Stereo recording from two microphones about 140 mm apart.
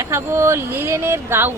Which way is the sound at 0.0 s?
20° right (ahead or behind).